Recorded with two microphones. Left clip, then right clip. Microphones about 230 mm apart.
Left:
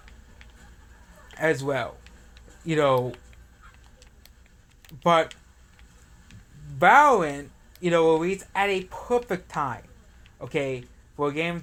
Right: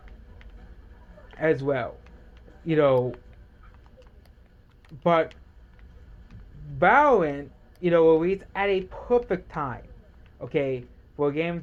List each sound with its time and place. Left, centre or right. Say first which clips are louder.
1.3 s a man's voice: right 1 dB; left
5.0 s speech: left 1 dB; left
6.7 s speech: left 2 dB; left